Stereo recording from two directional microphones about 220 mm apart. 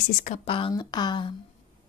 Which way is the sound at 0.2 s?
25° left (ahead or behind).